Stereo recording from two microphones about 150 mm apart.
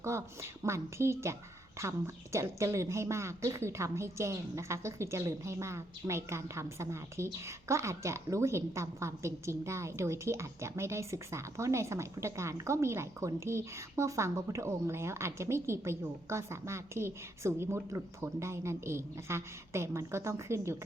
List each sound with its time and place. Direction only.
0.0 s a woman's voice: 20° right (ahead or behind)